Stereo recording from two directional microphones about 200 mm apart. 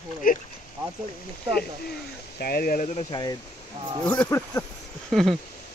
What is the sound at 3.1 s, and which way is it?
Speech, 20° left (ahead or behind).